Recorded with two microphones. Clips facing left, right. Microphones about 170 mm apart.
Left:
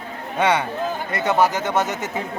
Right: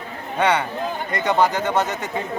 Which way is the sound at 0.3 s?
10° left (ahead or behind).